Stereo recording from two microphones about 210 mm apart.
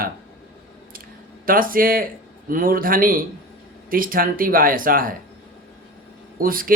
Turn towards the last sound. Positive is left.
turn(degrees=-45)  # may be behind; listen again after turning